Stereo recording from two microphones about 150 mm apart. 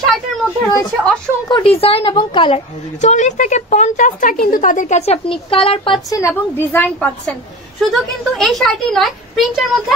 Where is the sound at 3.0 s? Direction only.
50° left (ahead or behind); by 6.0 s 35° left (ahead or behind).